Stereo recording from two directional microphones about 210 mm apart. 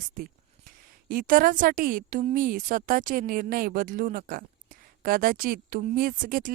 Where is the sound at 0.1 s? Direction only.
40° right (ahead or behind).